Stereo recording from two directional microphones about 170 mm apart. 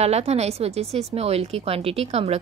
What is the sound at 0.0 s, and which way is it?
A woman's voice, 40° right (ahead or behind).